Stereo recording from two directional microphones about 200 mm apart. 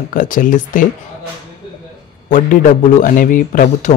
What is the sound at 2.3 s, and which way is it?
A man's voice, 40° left (ahead or behind).